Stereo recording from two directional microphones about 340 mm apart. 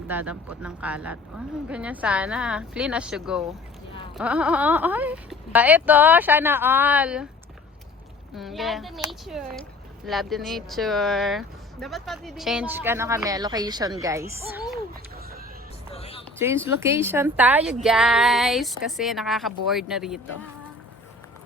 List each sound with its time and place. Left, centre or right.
0.1 s speech: centre
8.4 s a woman's voice: centre
15.9 s a sound: centre
16.4 s speech: centre